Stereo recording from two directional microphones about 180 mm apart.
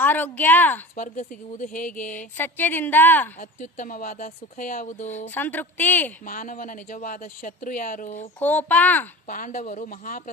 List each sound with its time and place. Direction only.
0.0 s speech: 10° left (ahead or behind)
0.9 s speech: 45° left (ahead or behind)
2.4 s speech: 10° left (ahead or behind)
3.6 s speech: 45° left (ahead or behind)
5.1 s speech: 10° left (ahead or behind)
6.2 s speech: 50° left (ahead or behind)
8.4 s speech: 10° left (ahead or behind)
9.2 s speech: 50° left (ahead or behind)